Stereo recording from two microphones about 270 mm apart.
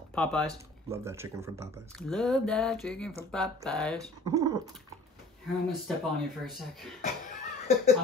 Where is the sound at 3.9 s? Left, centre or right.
Centre.